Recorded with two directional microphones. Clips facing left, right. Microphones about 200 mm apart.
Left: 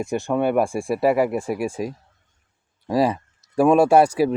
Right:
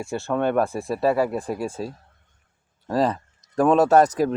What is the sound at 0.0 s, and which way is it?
Speech, 15° left (ahead or behind).